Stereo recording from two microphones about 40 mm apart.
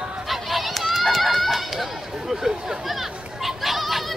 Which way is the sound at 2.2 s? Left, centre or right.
Centre.